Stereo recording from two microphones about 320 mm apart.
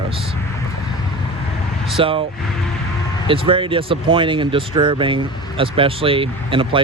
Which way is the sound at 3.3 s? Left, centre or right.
Centre.